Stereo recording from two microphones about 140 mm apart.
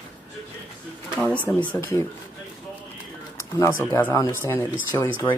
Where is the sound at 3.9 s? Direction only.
20° left (ahead or behind).